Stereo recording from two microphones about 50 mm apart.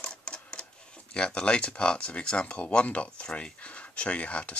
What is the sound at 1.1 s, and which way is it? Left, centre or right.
Speech, centre.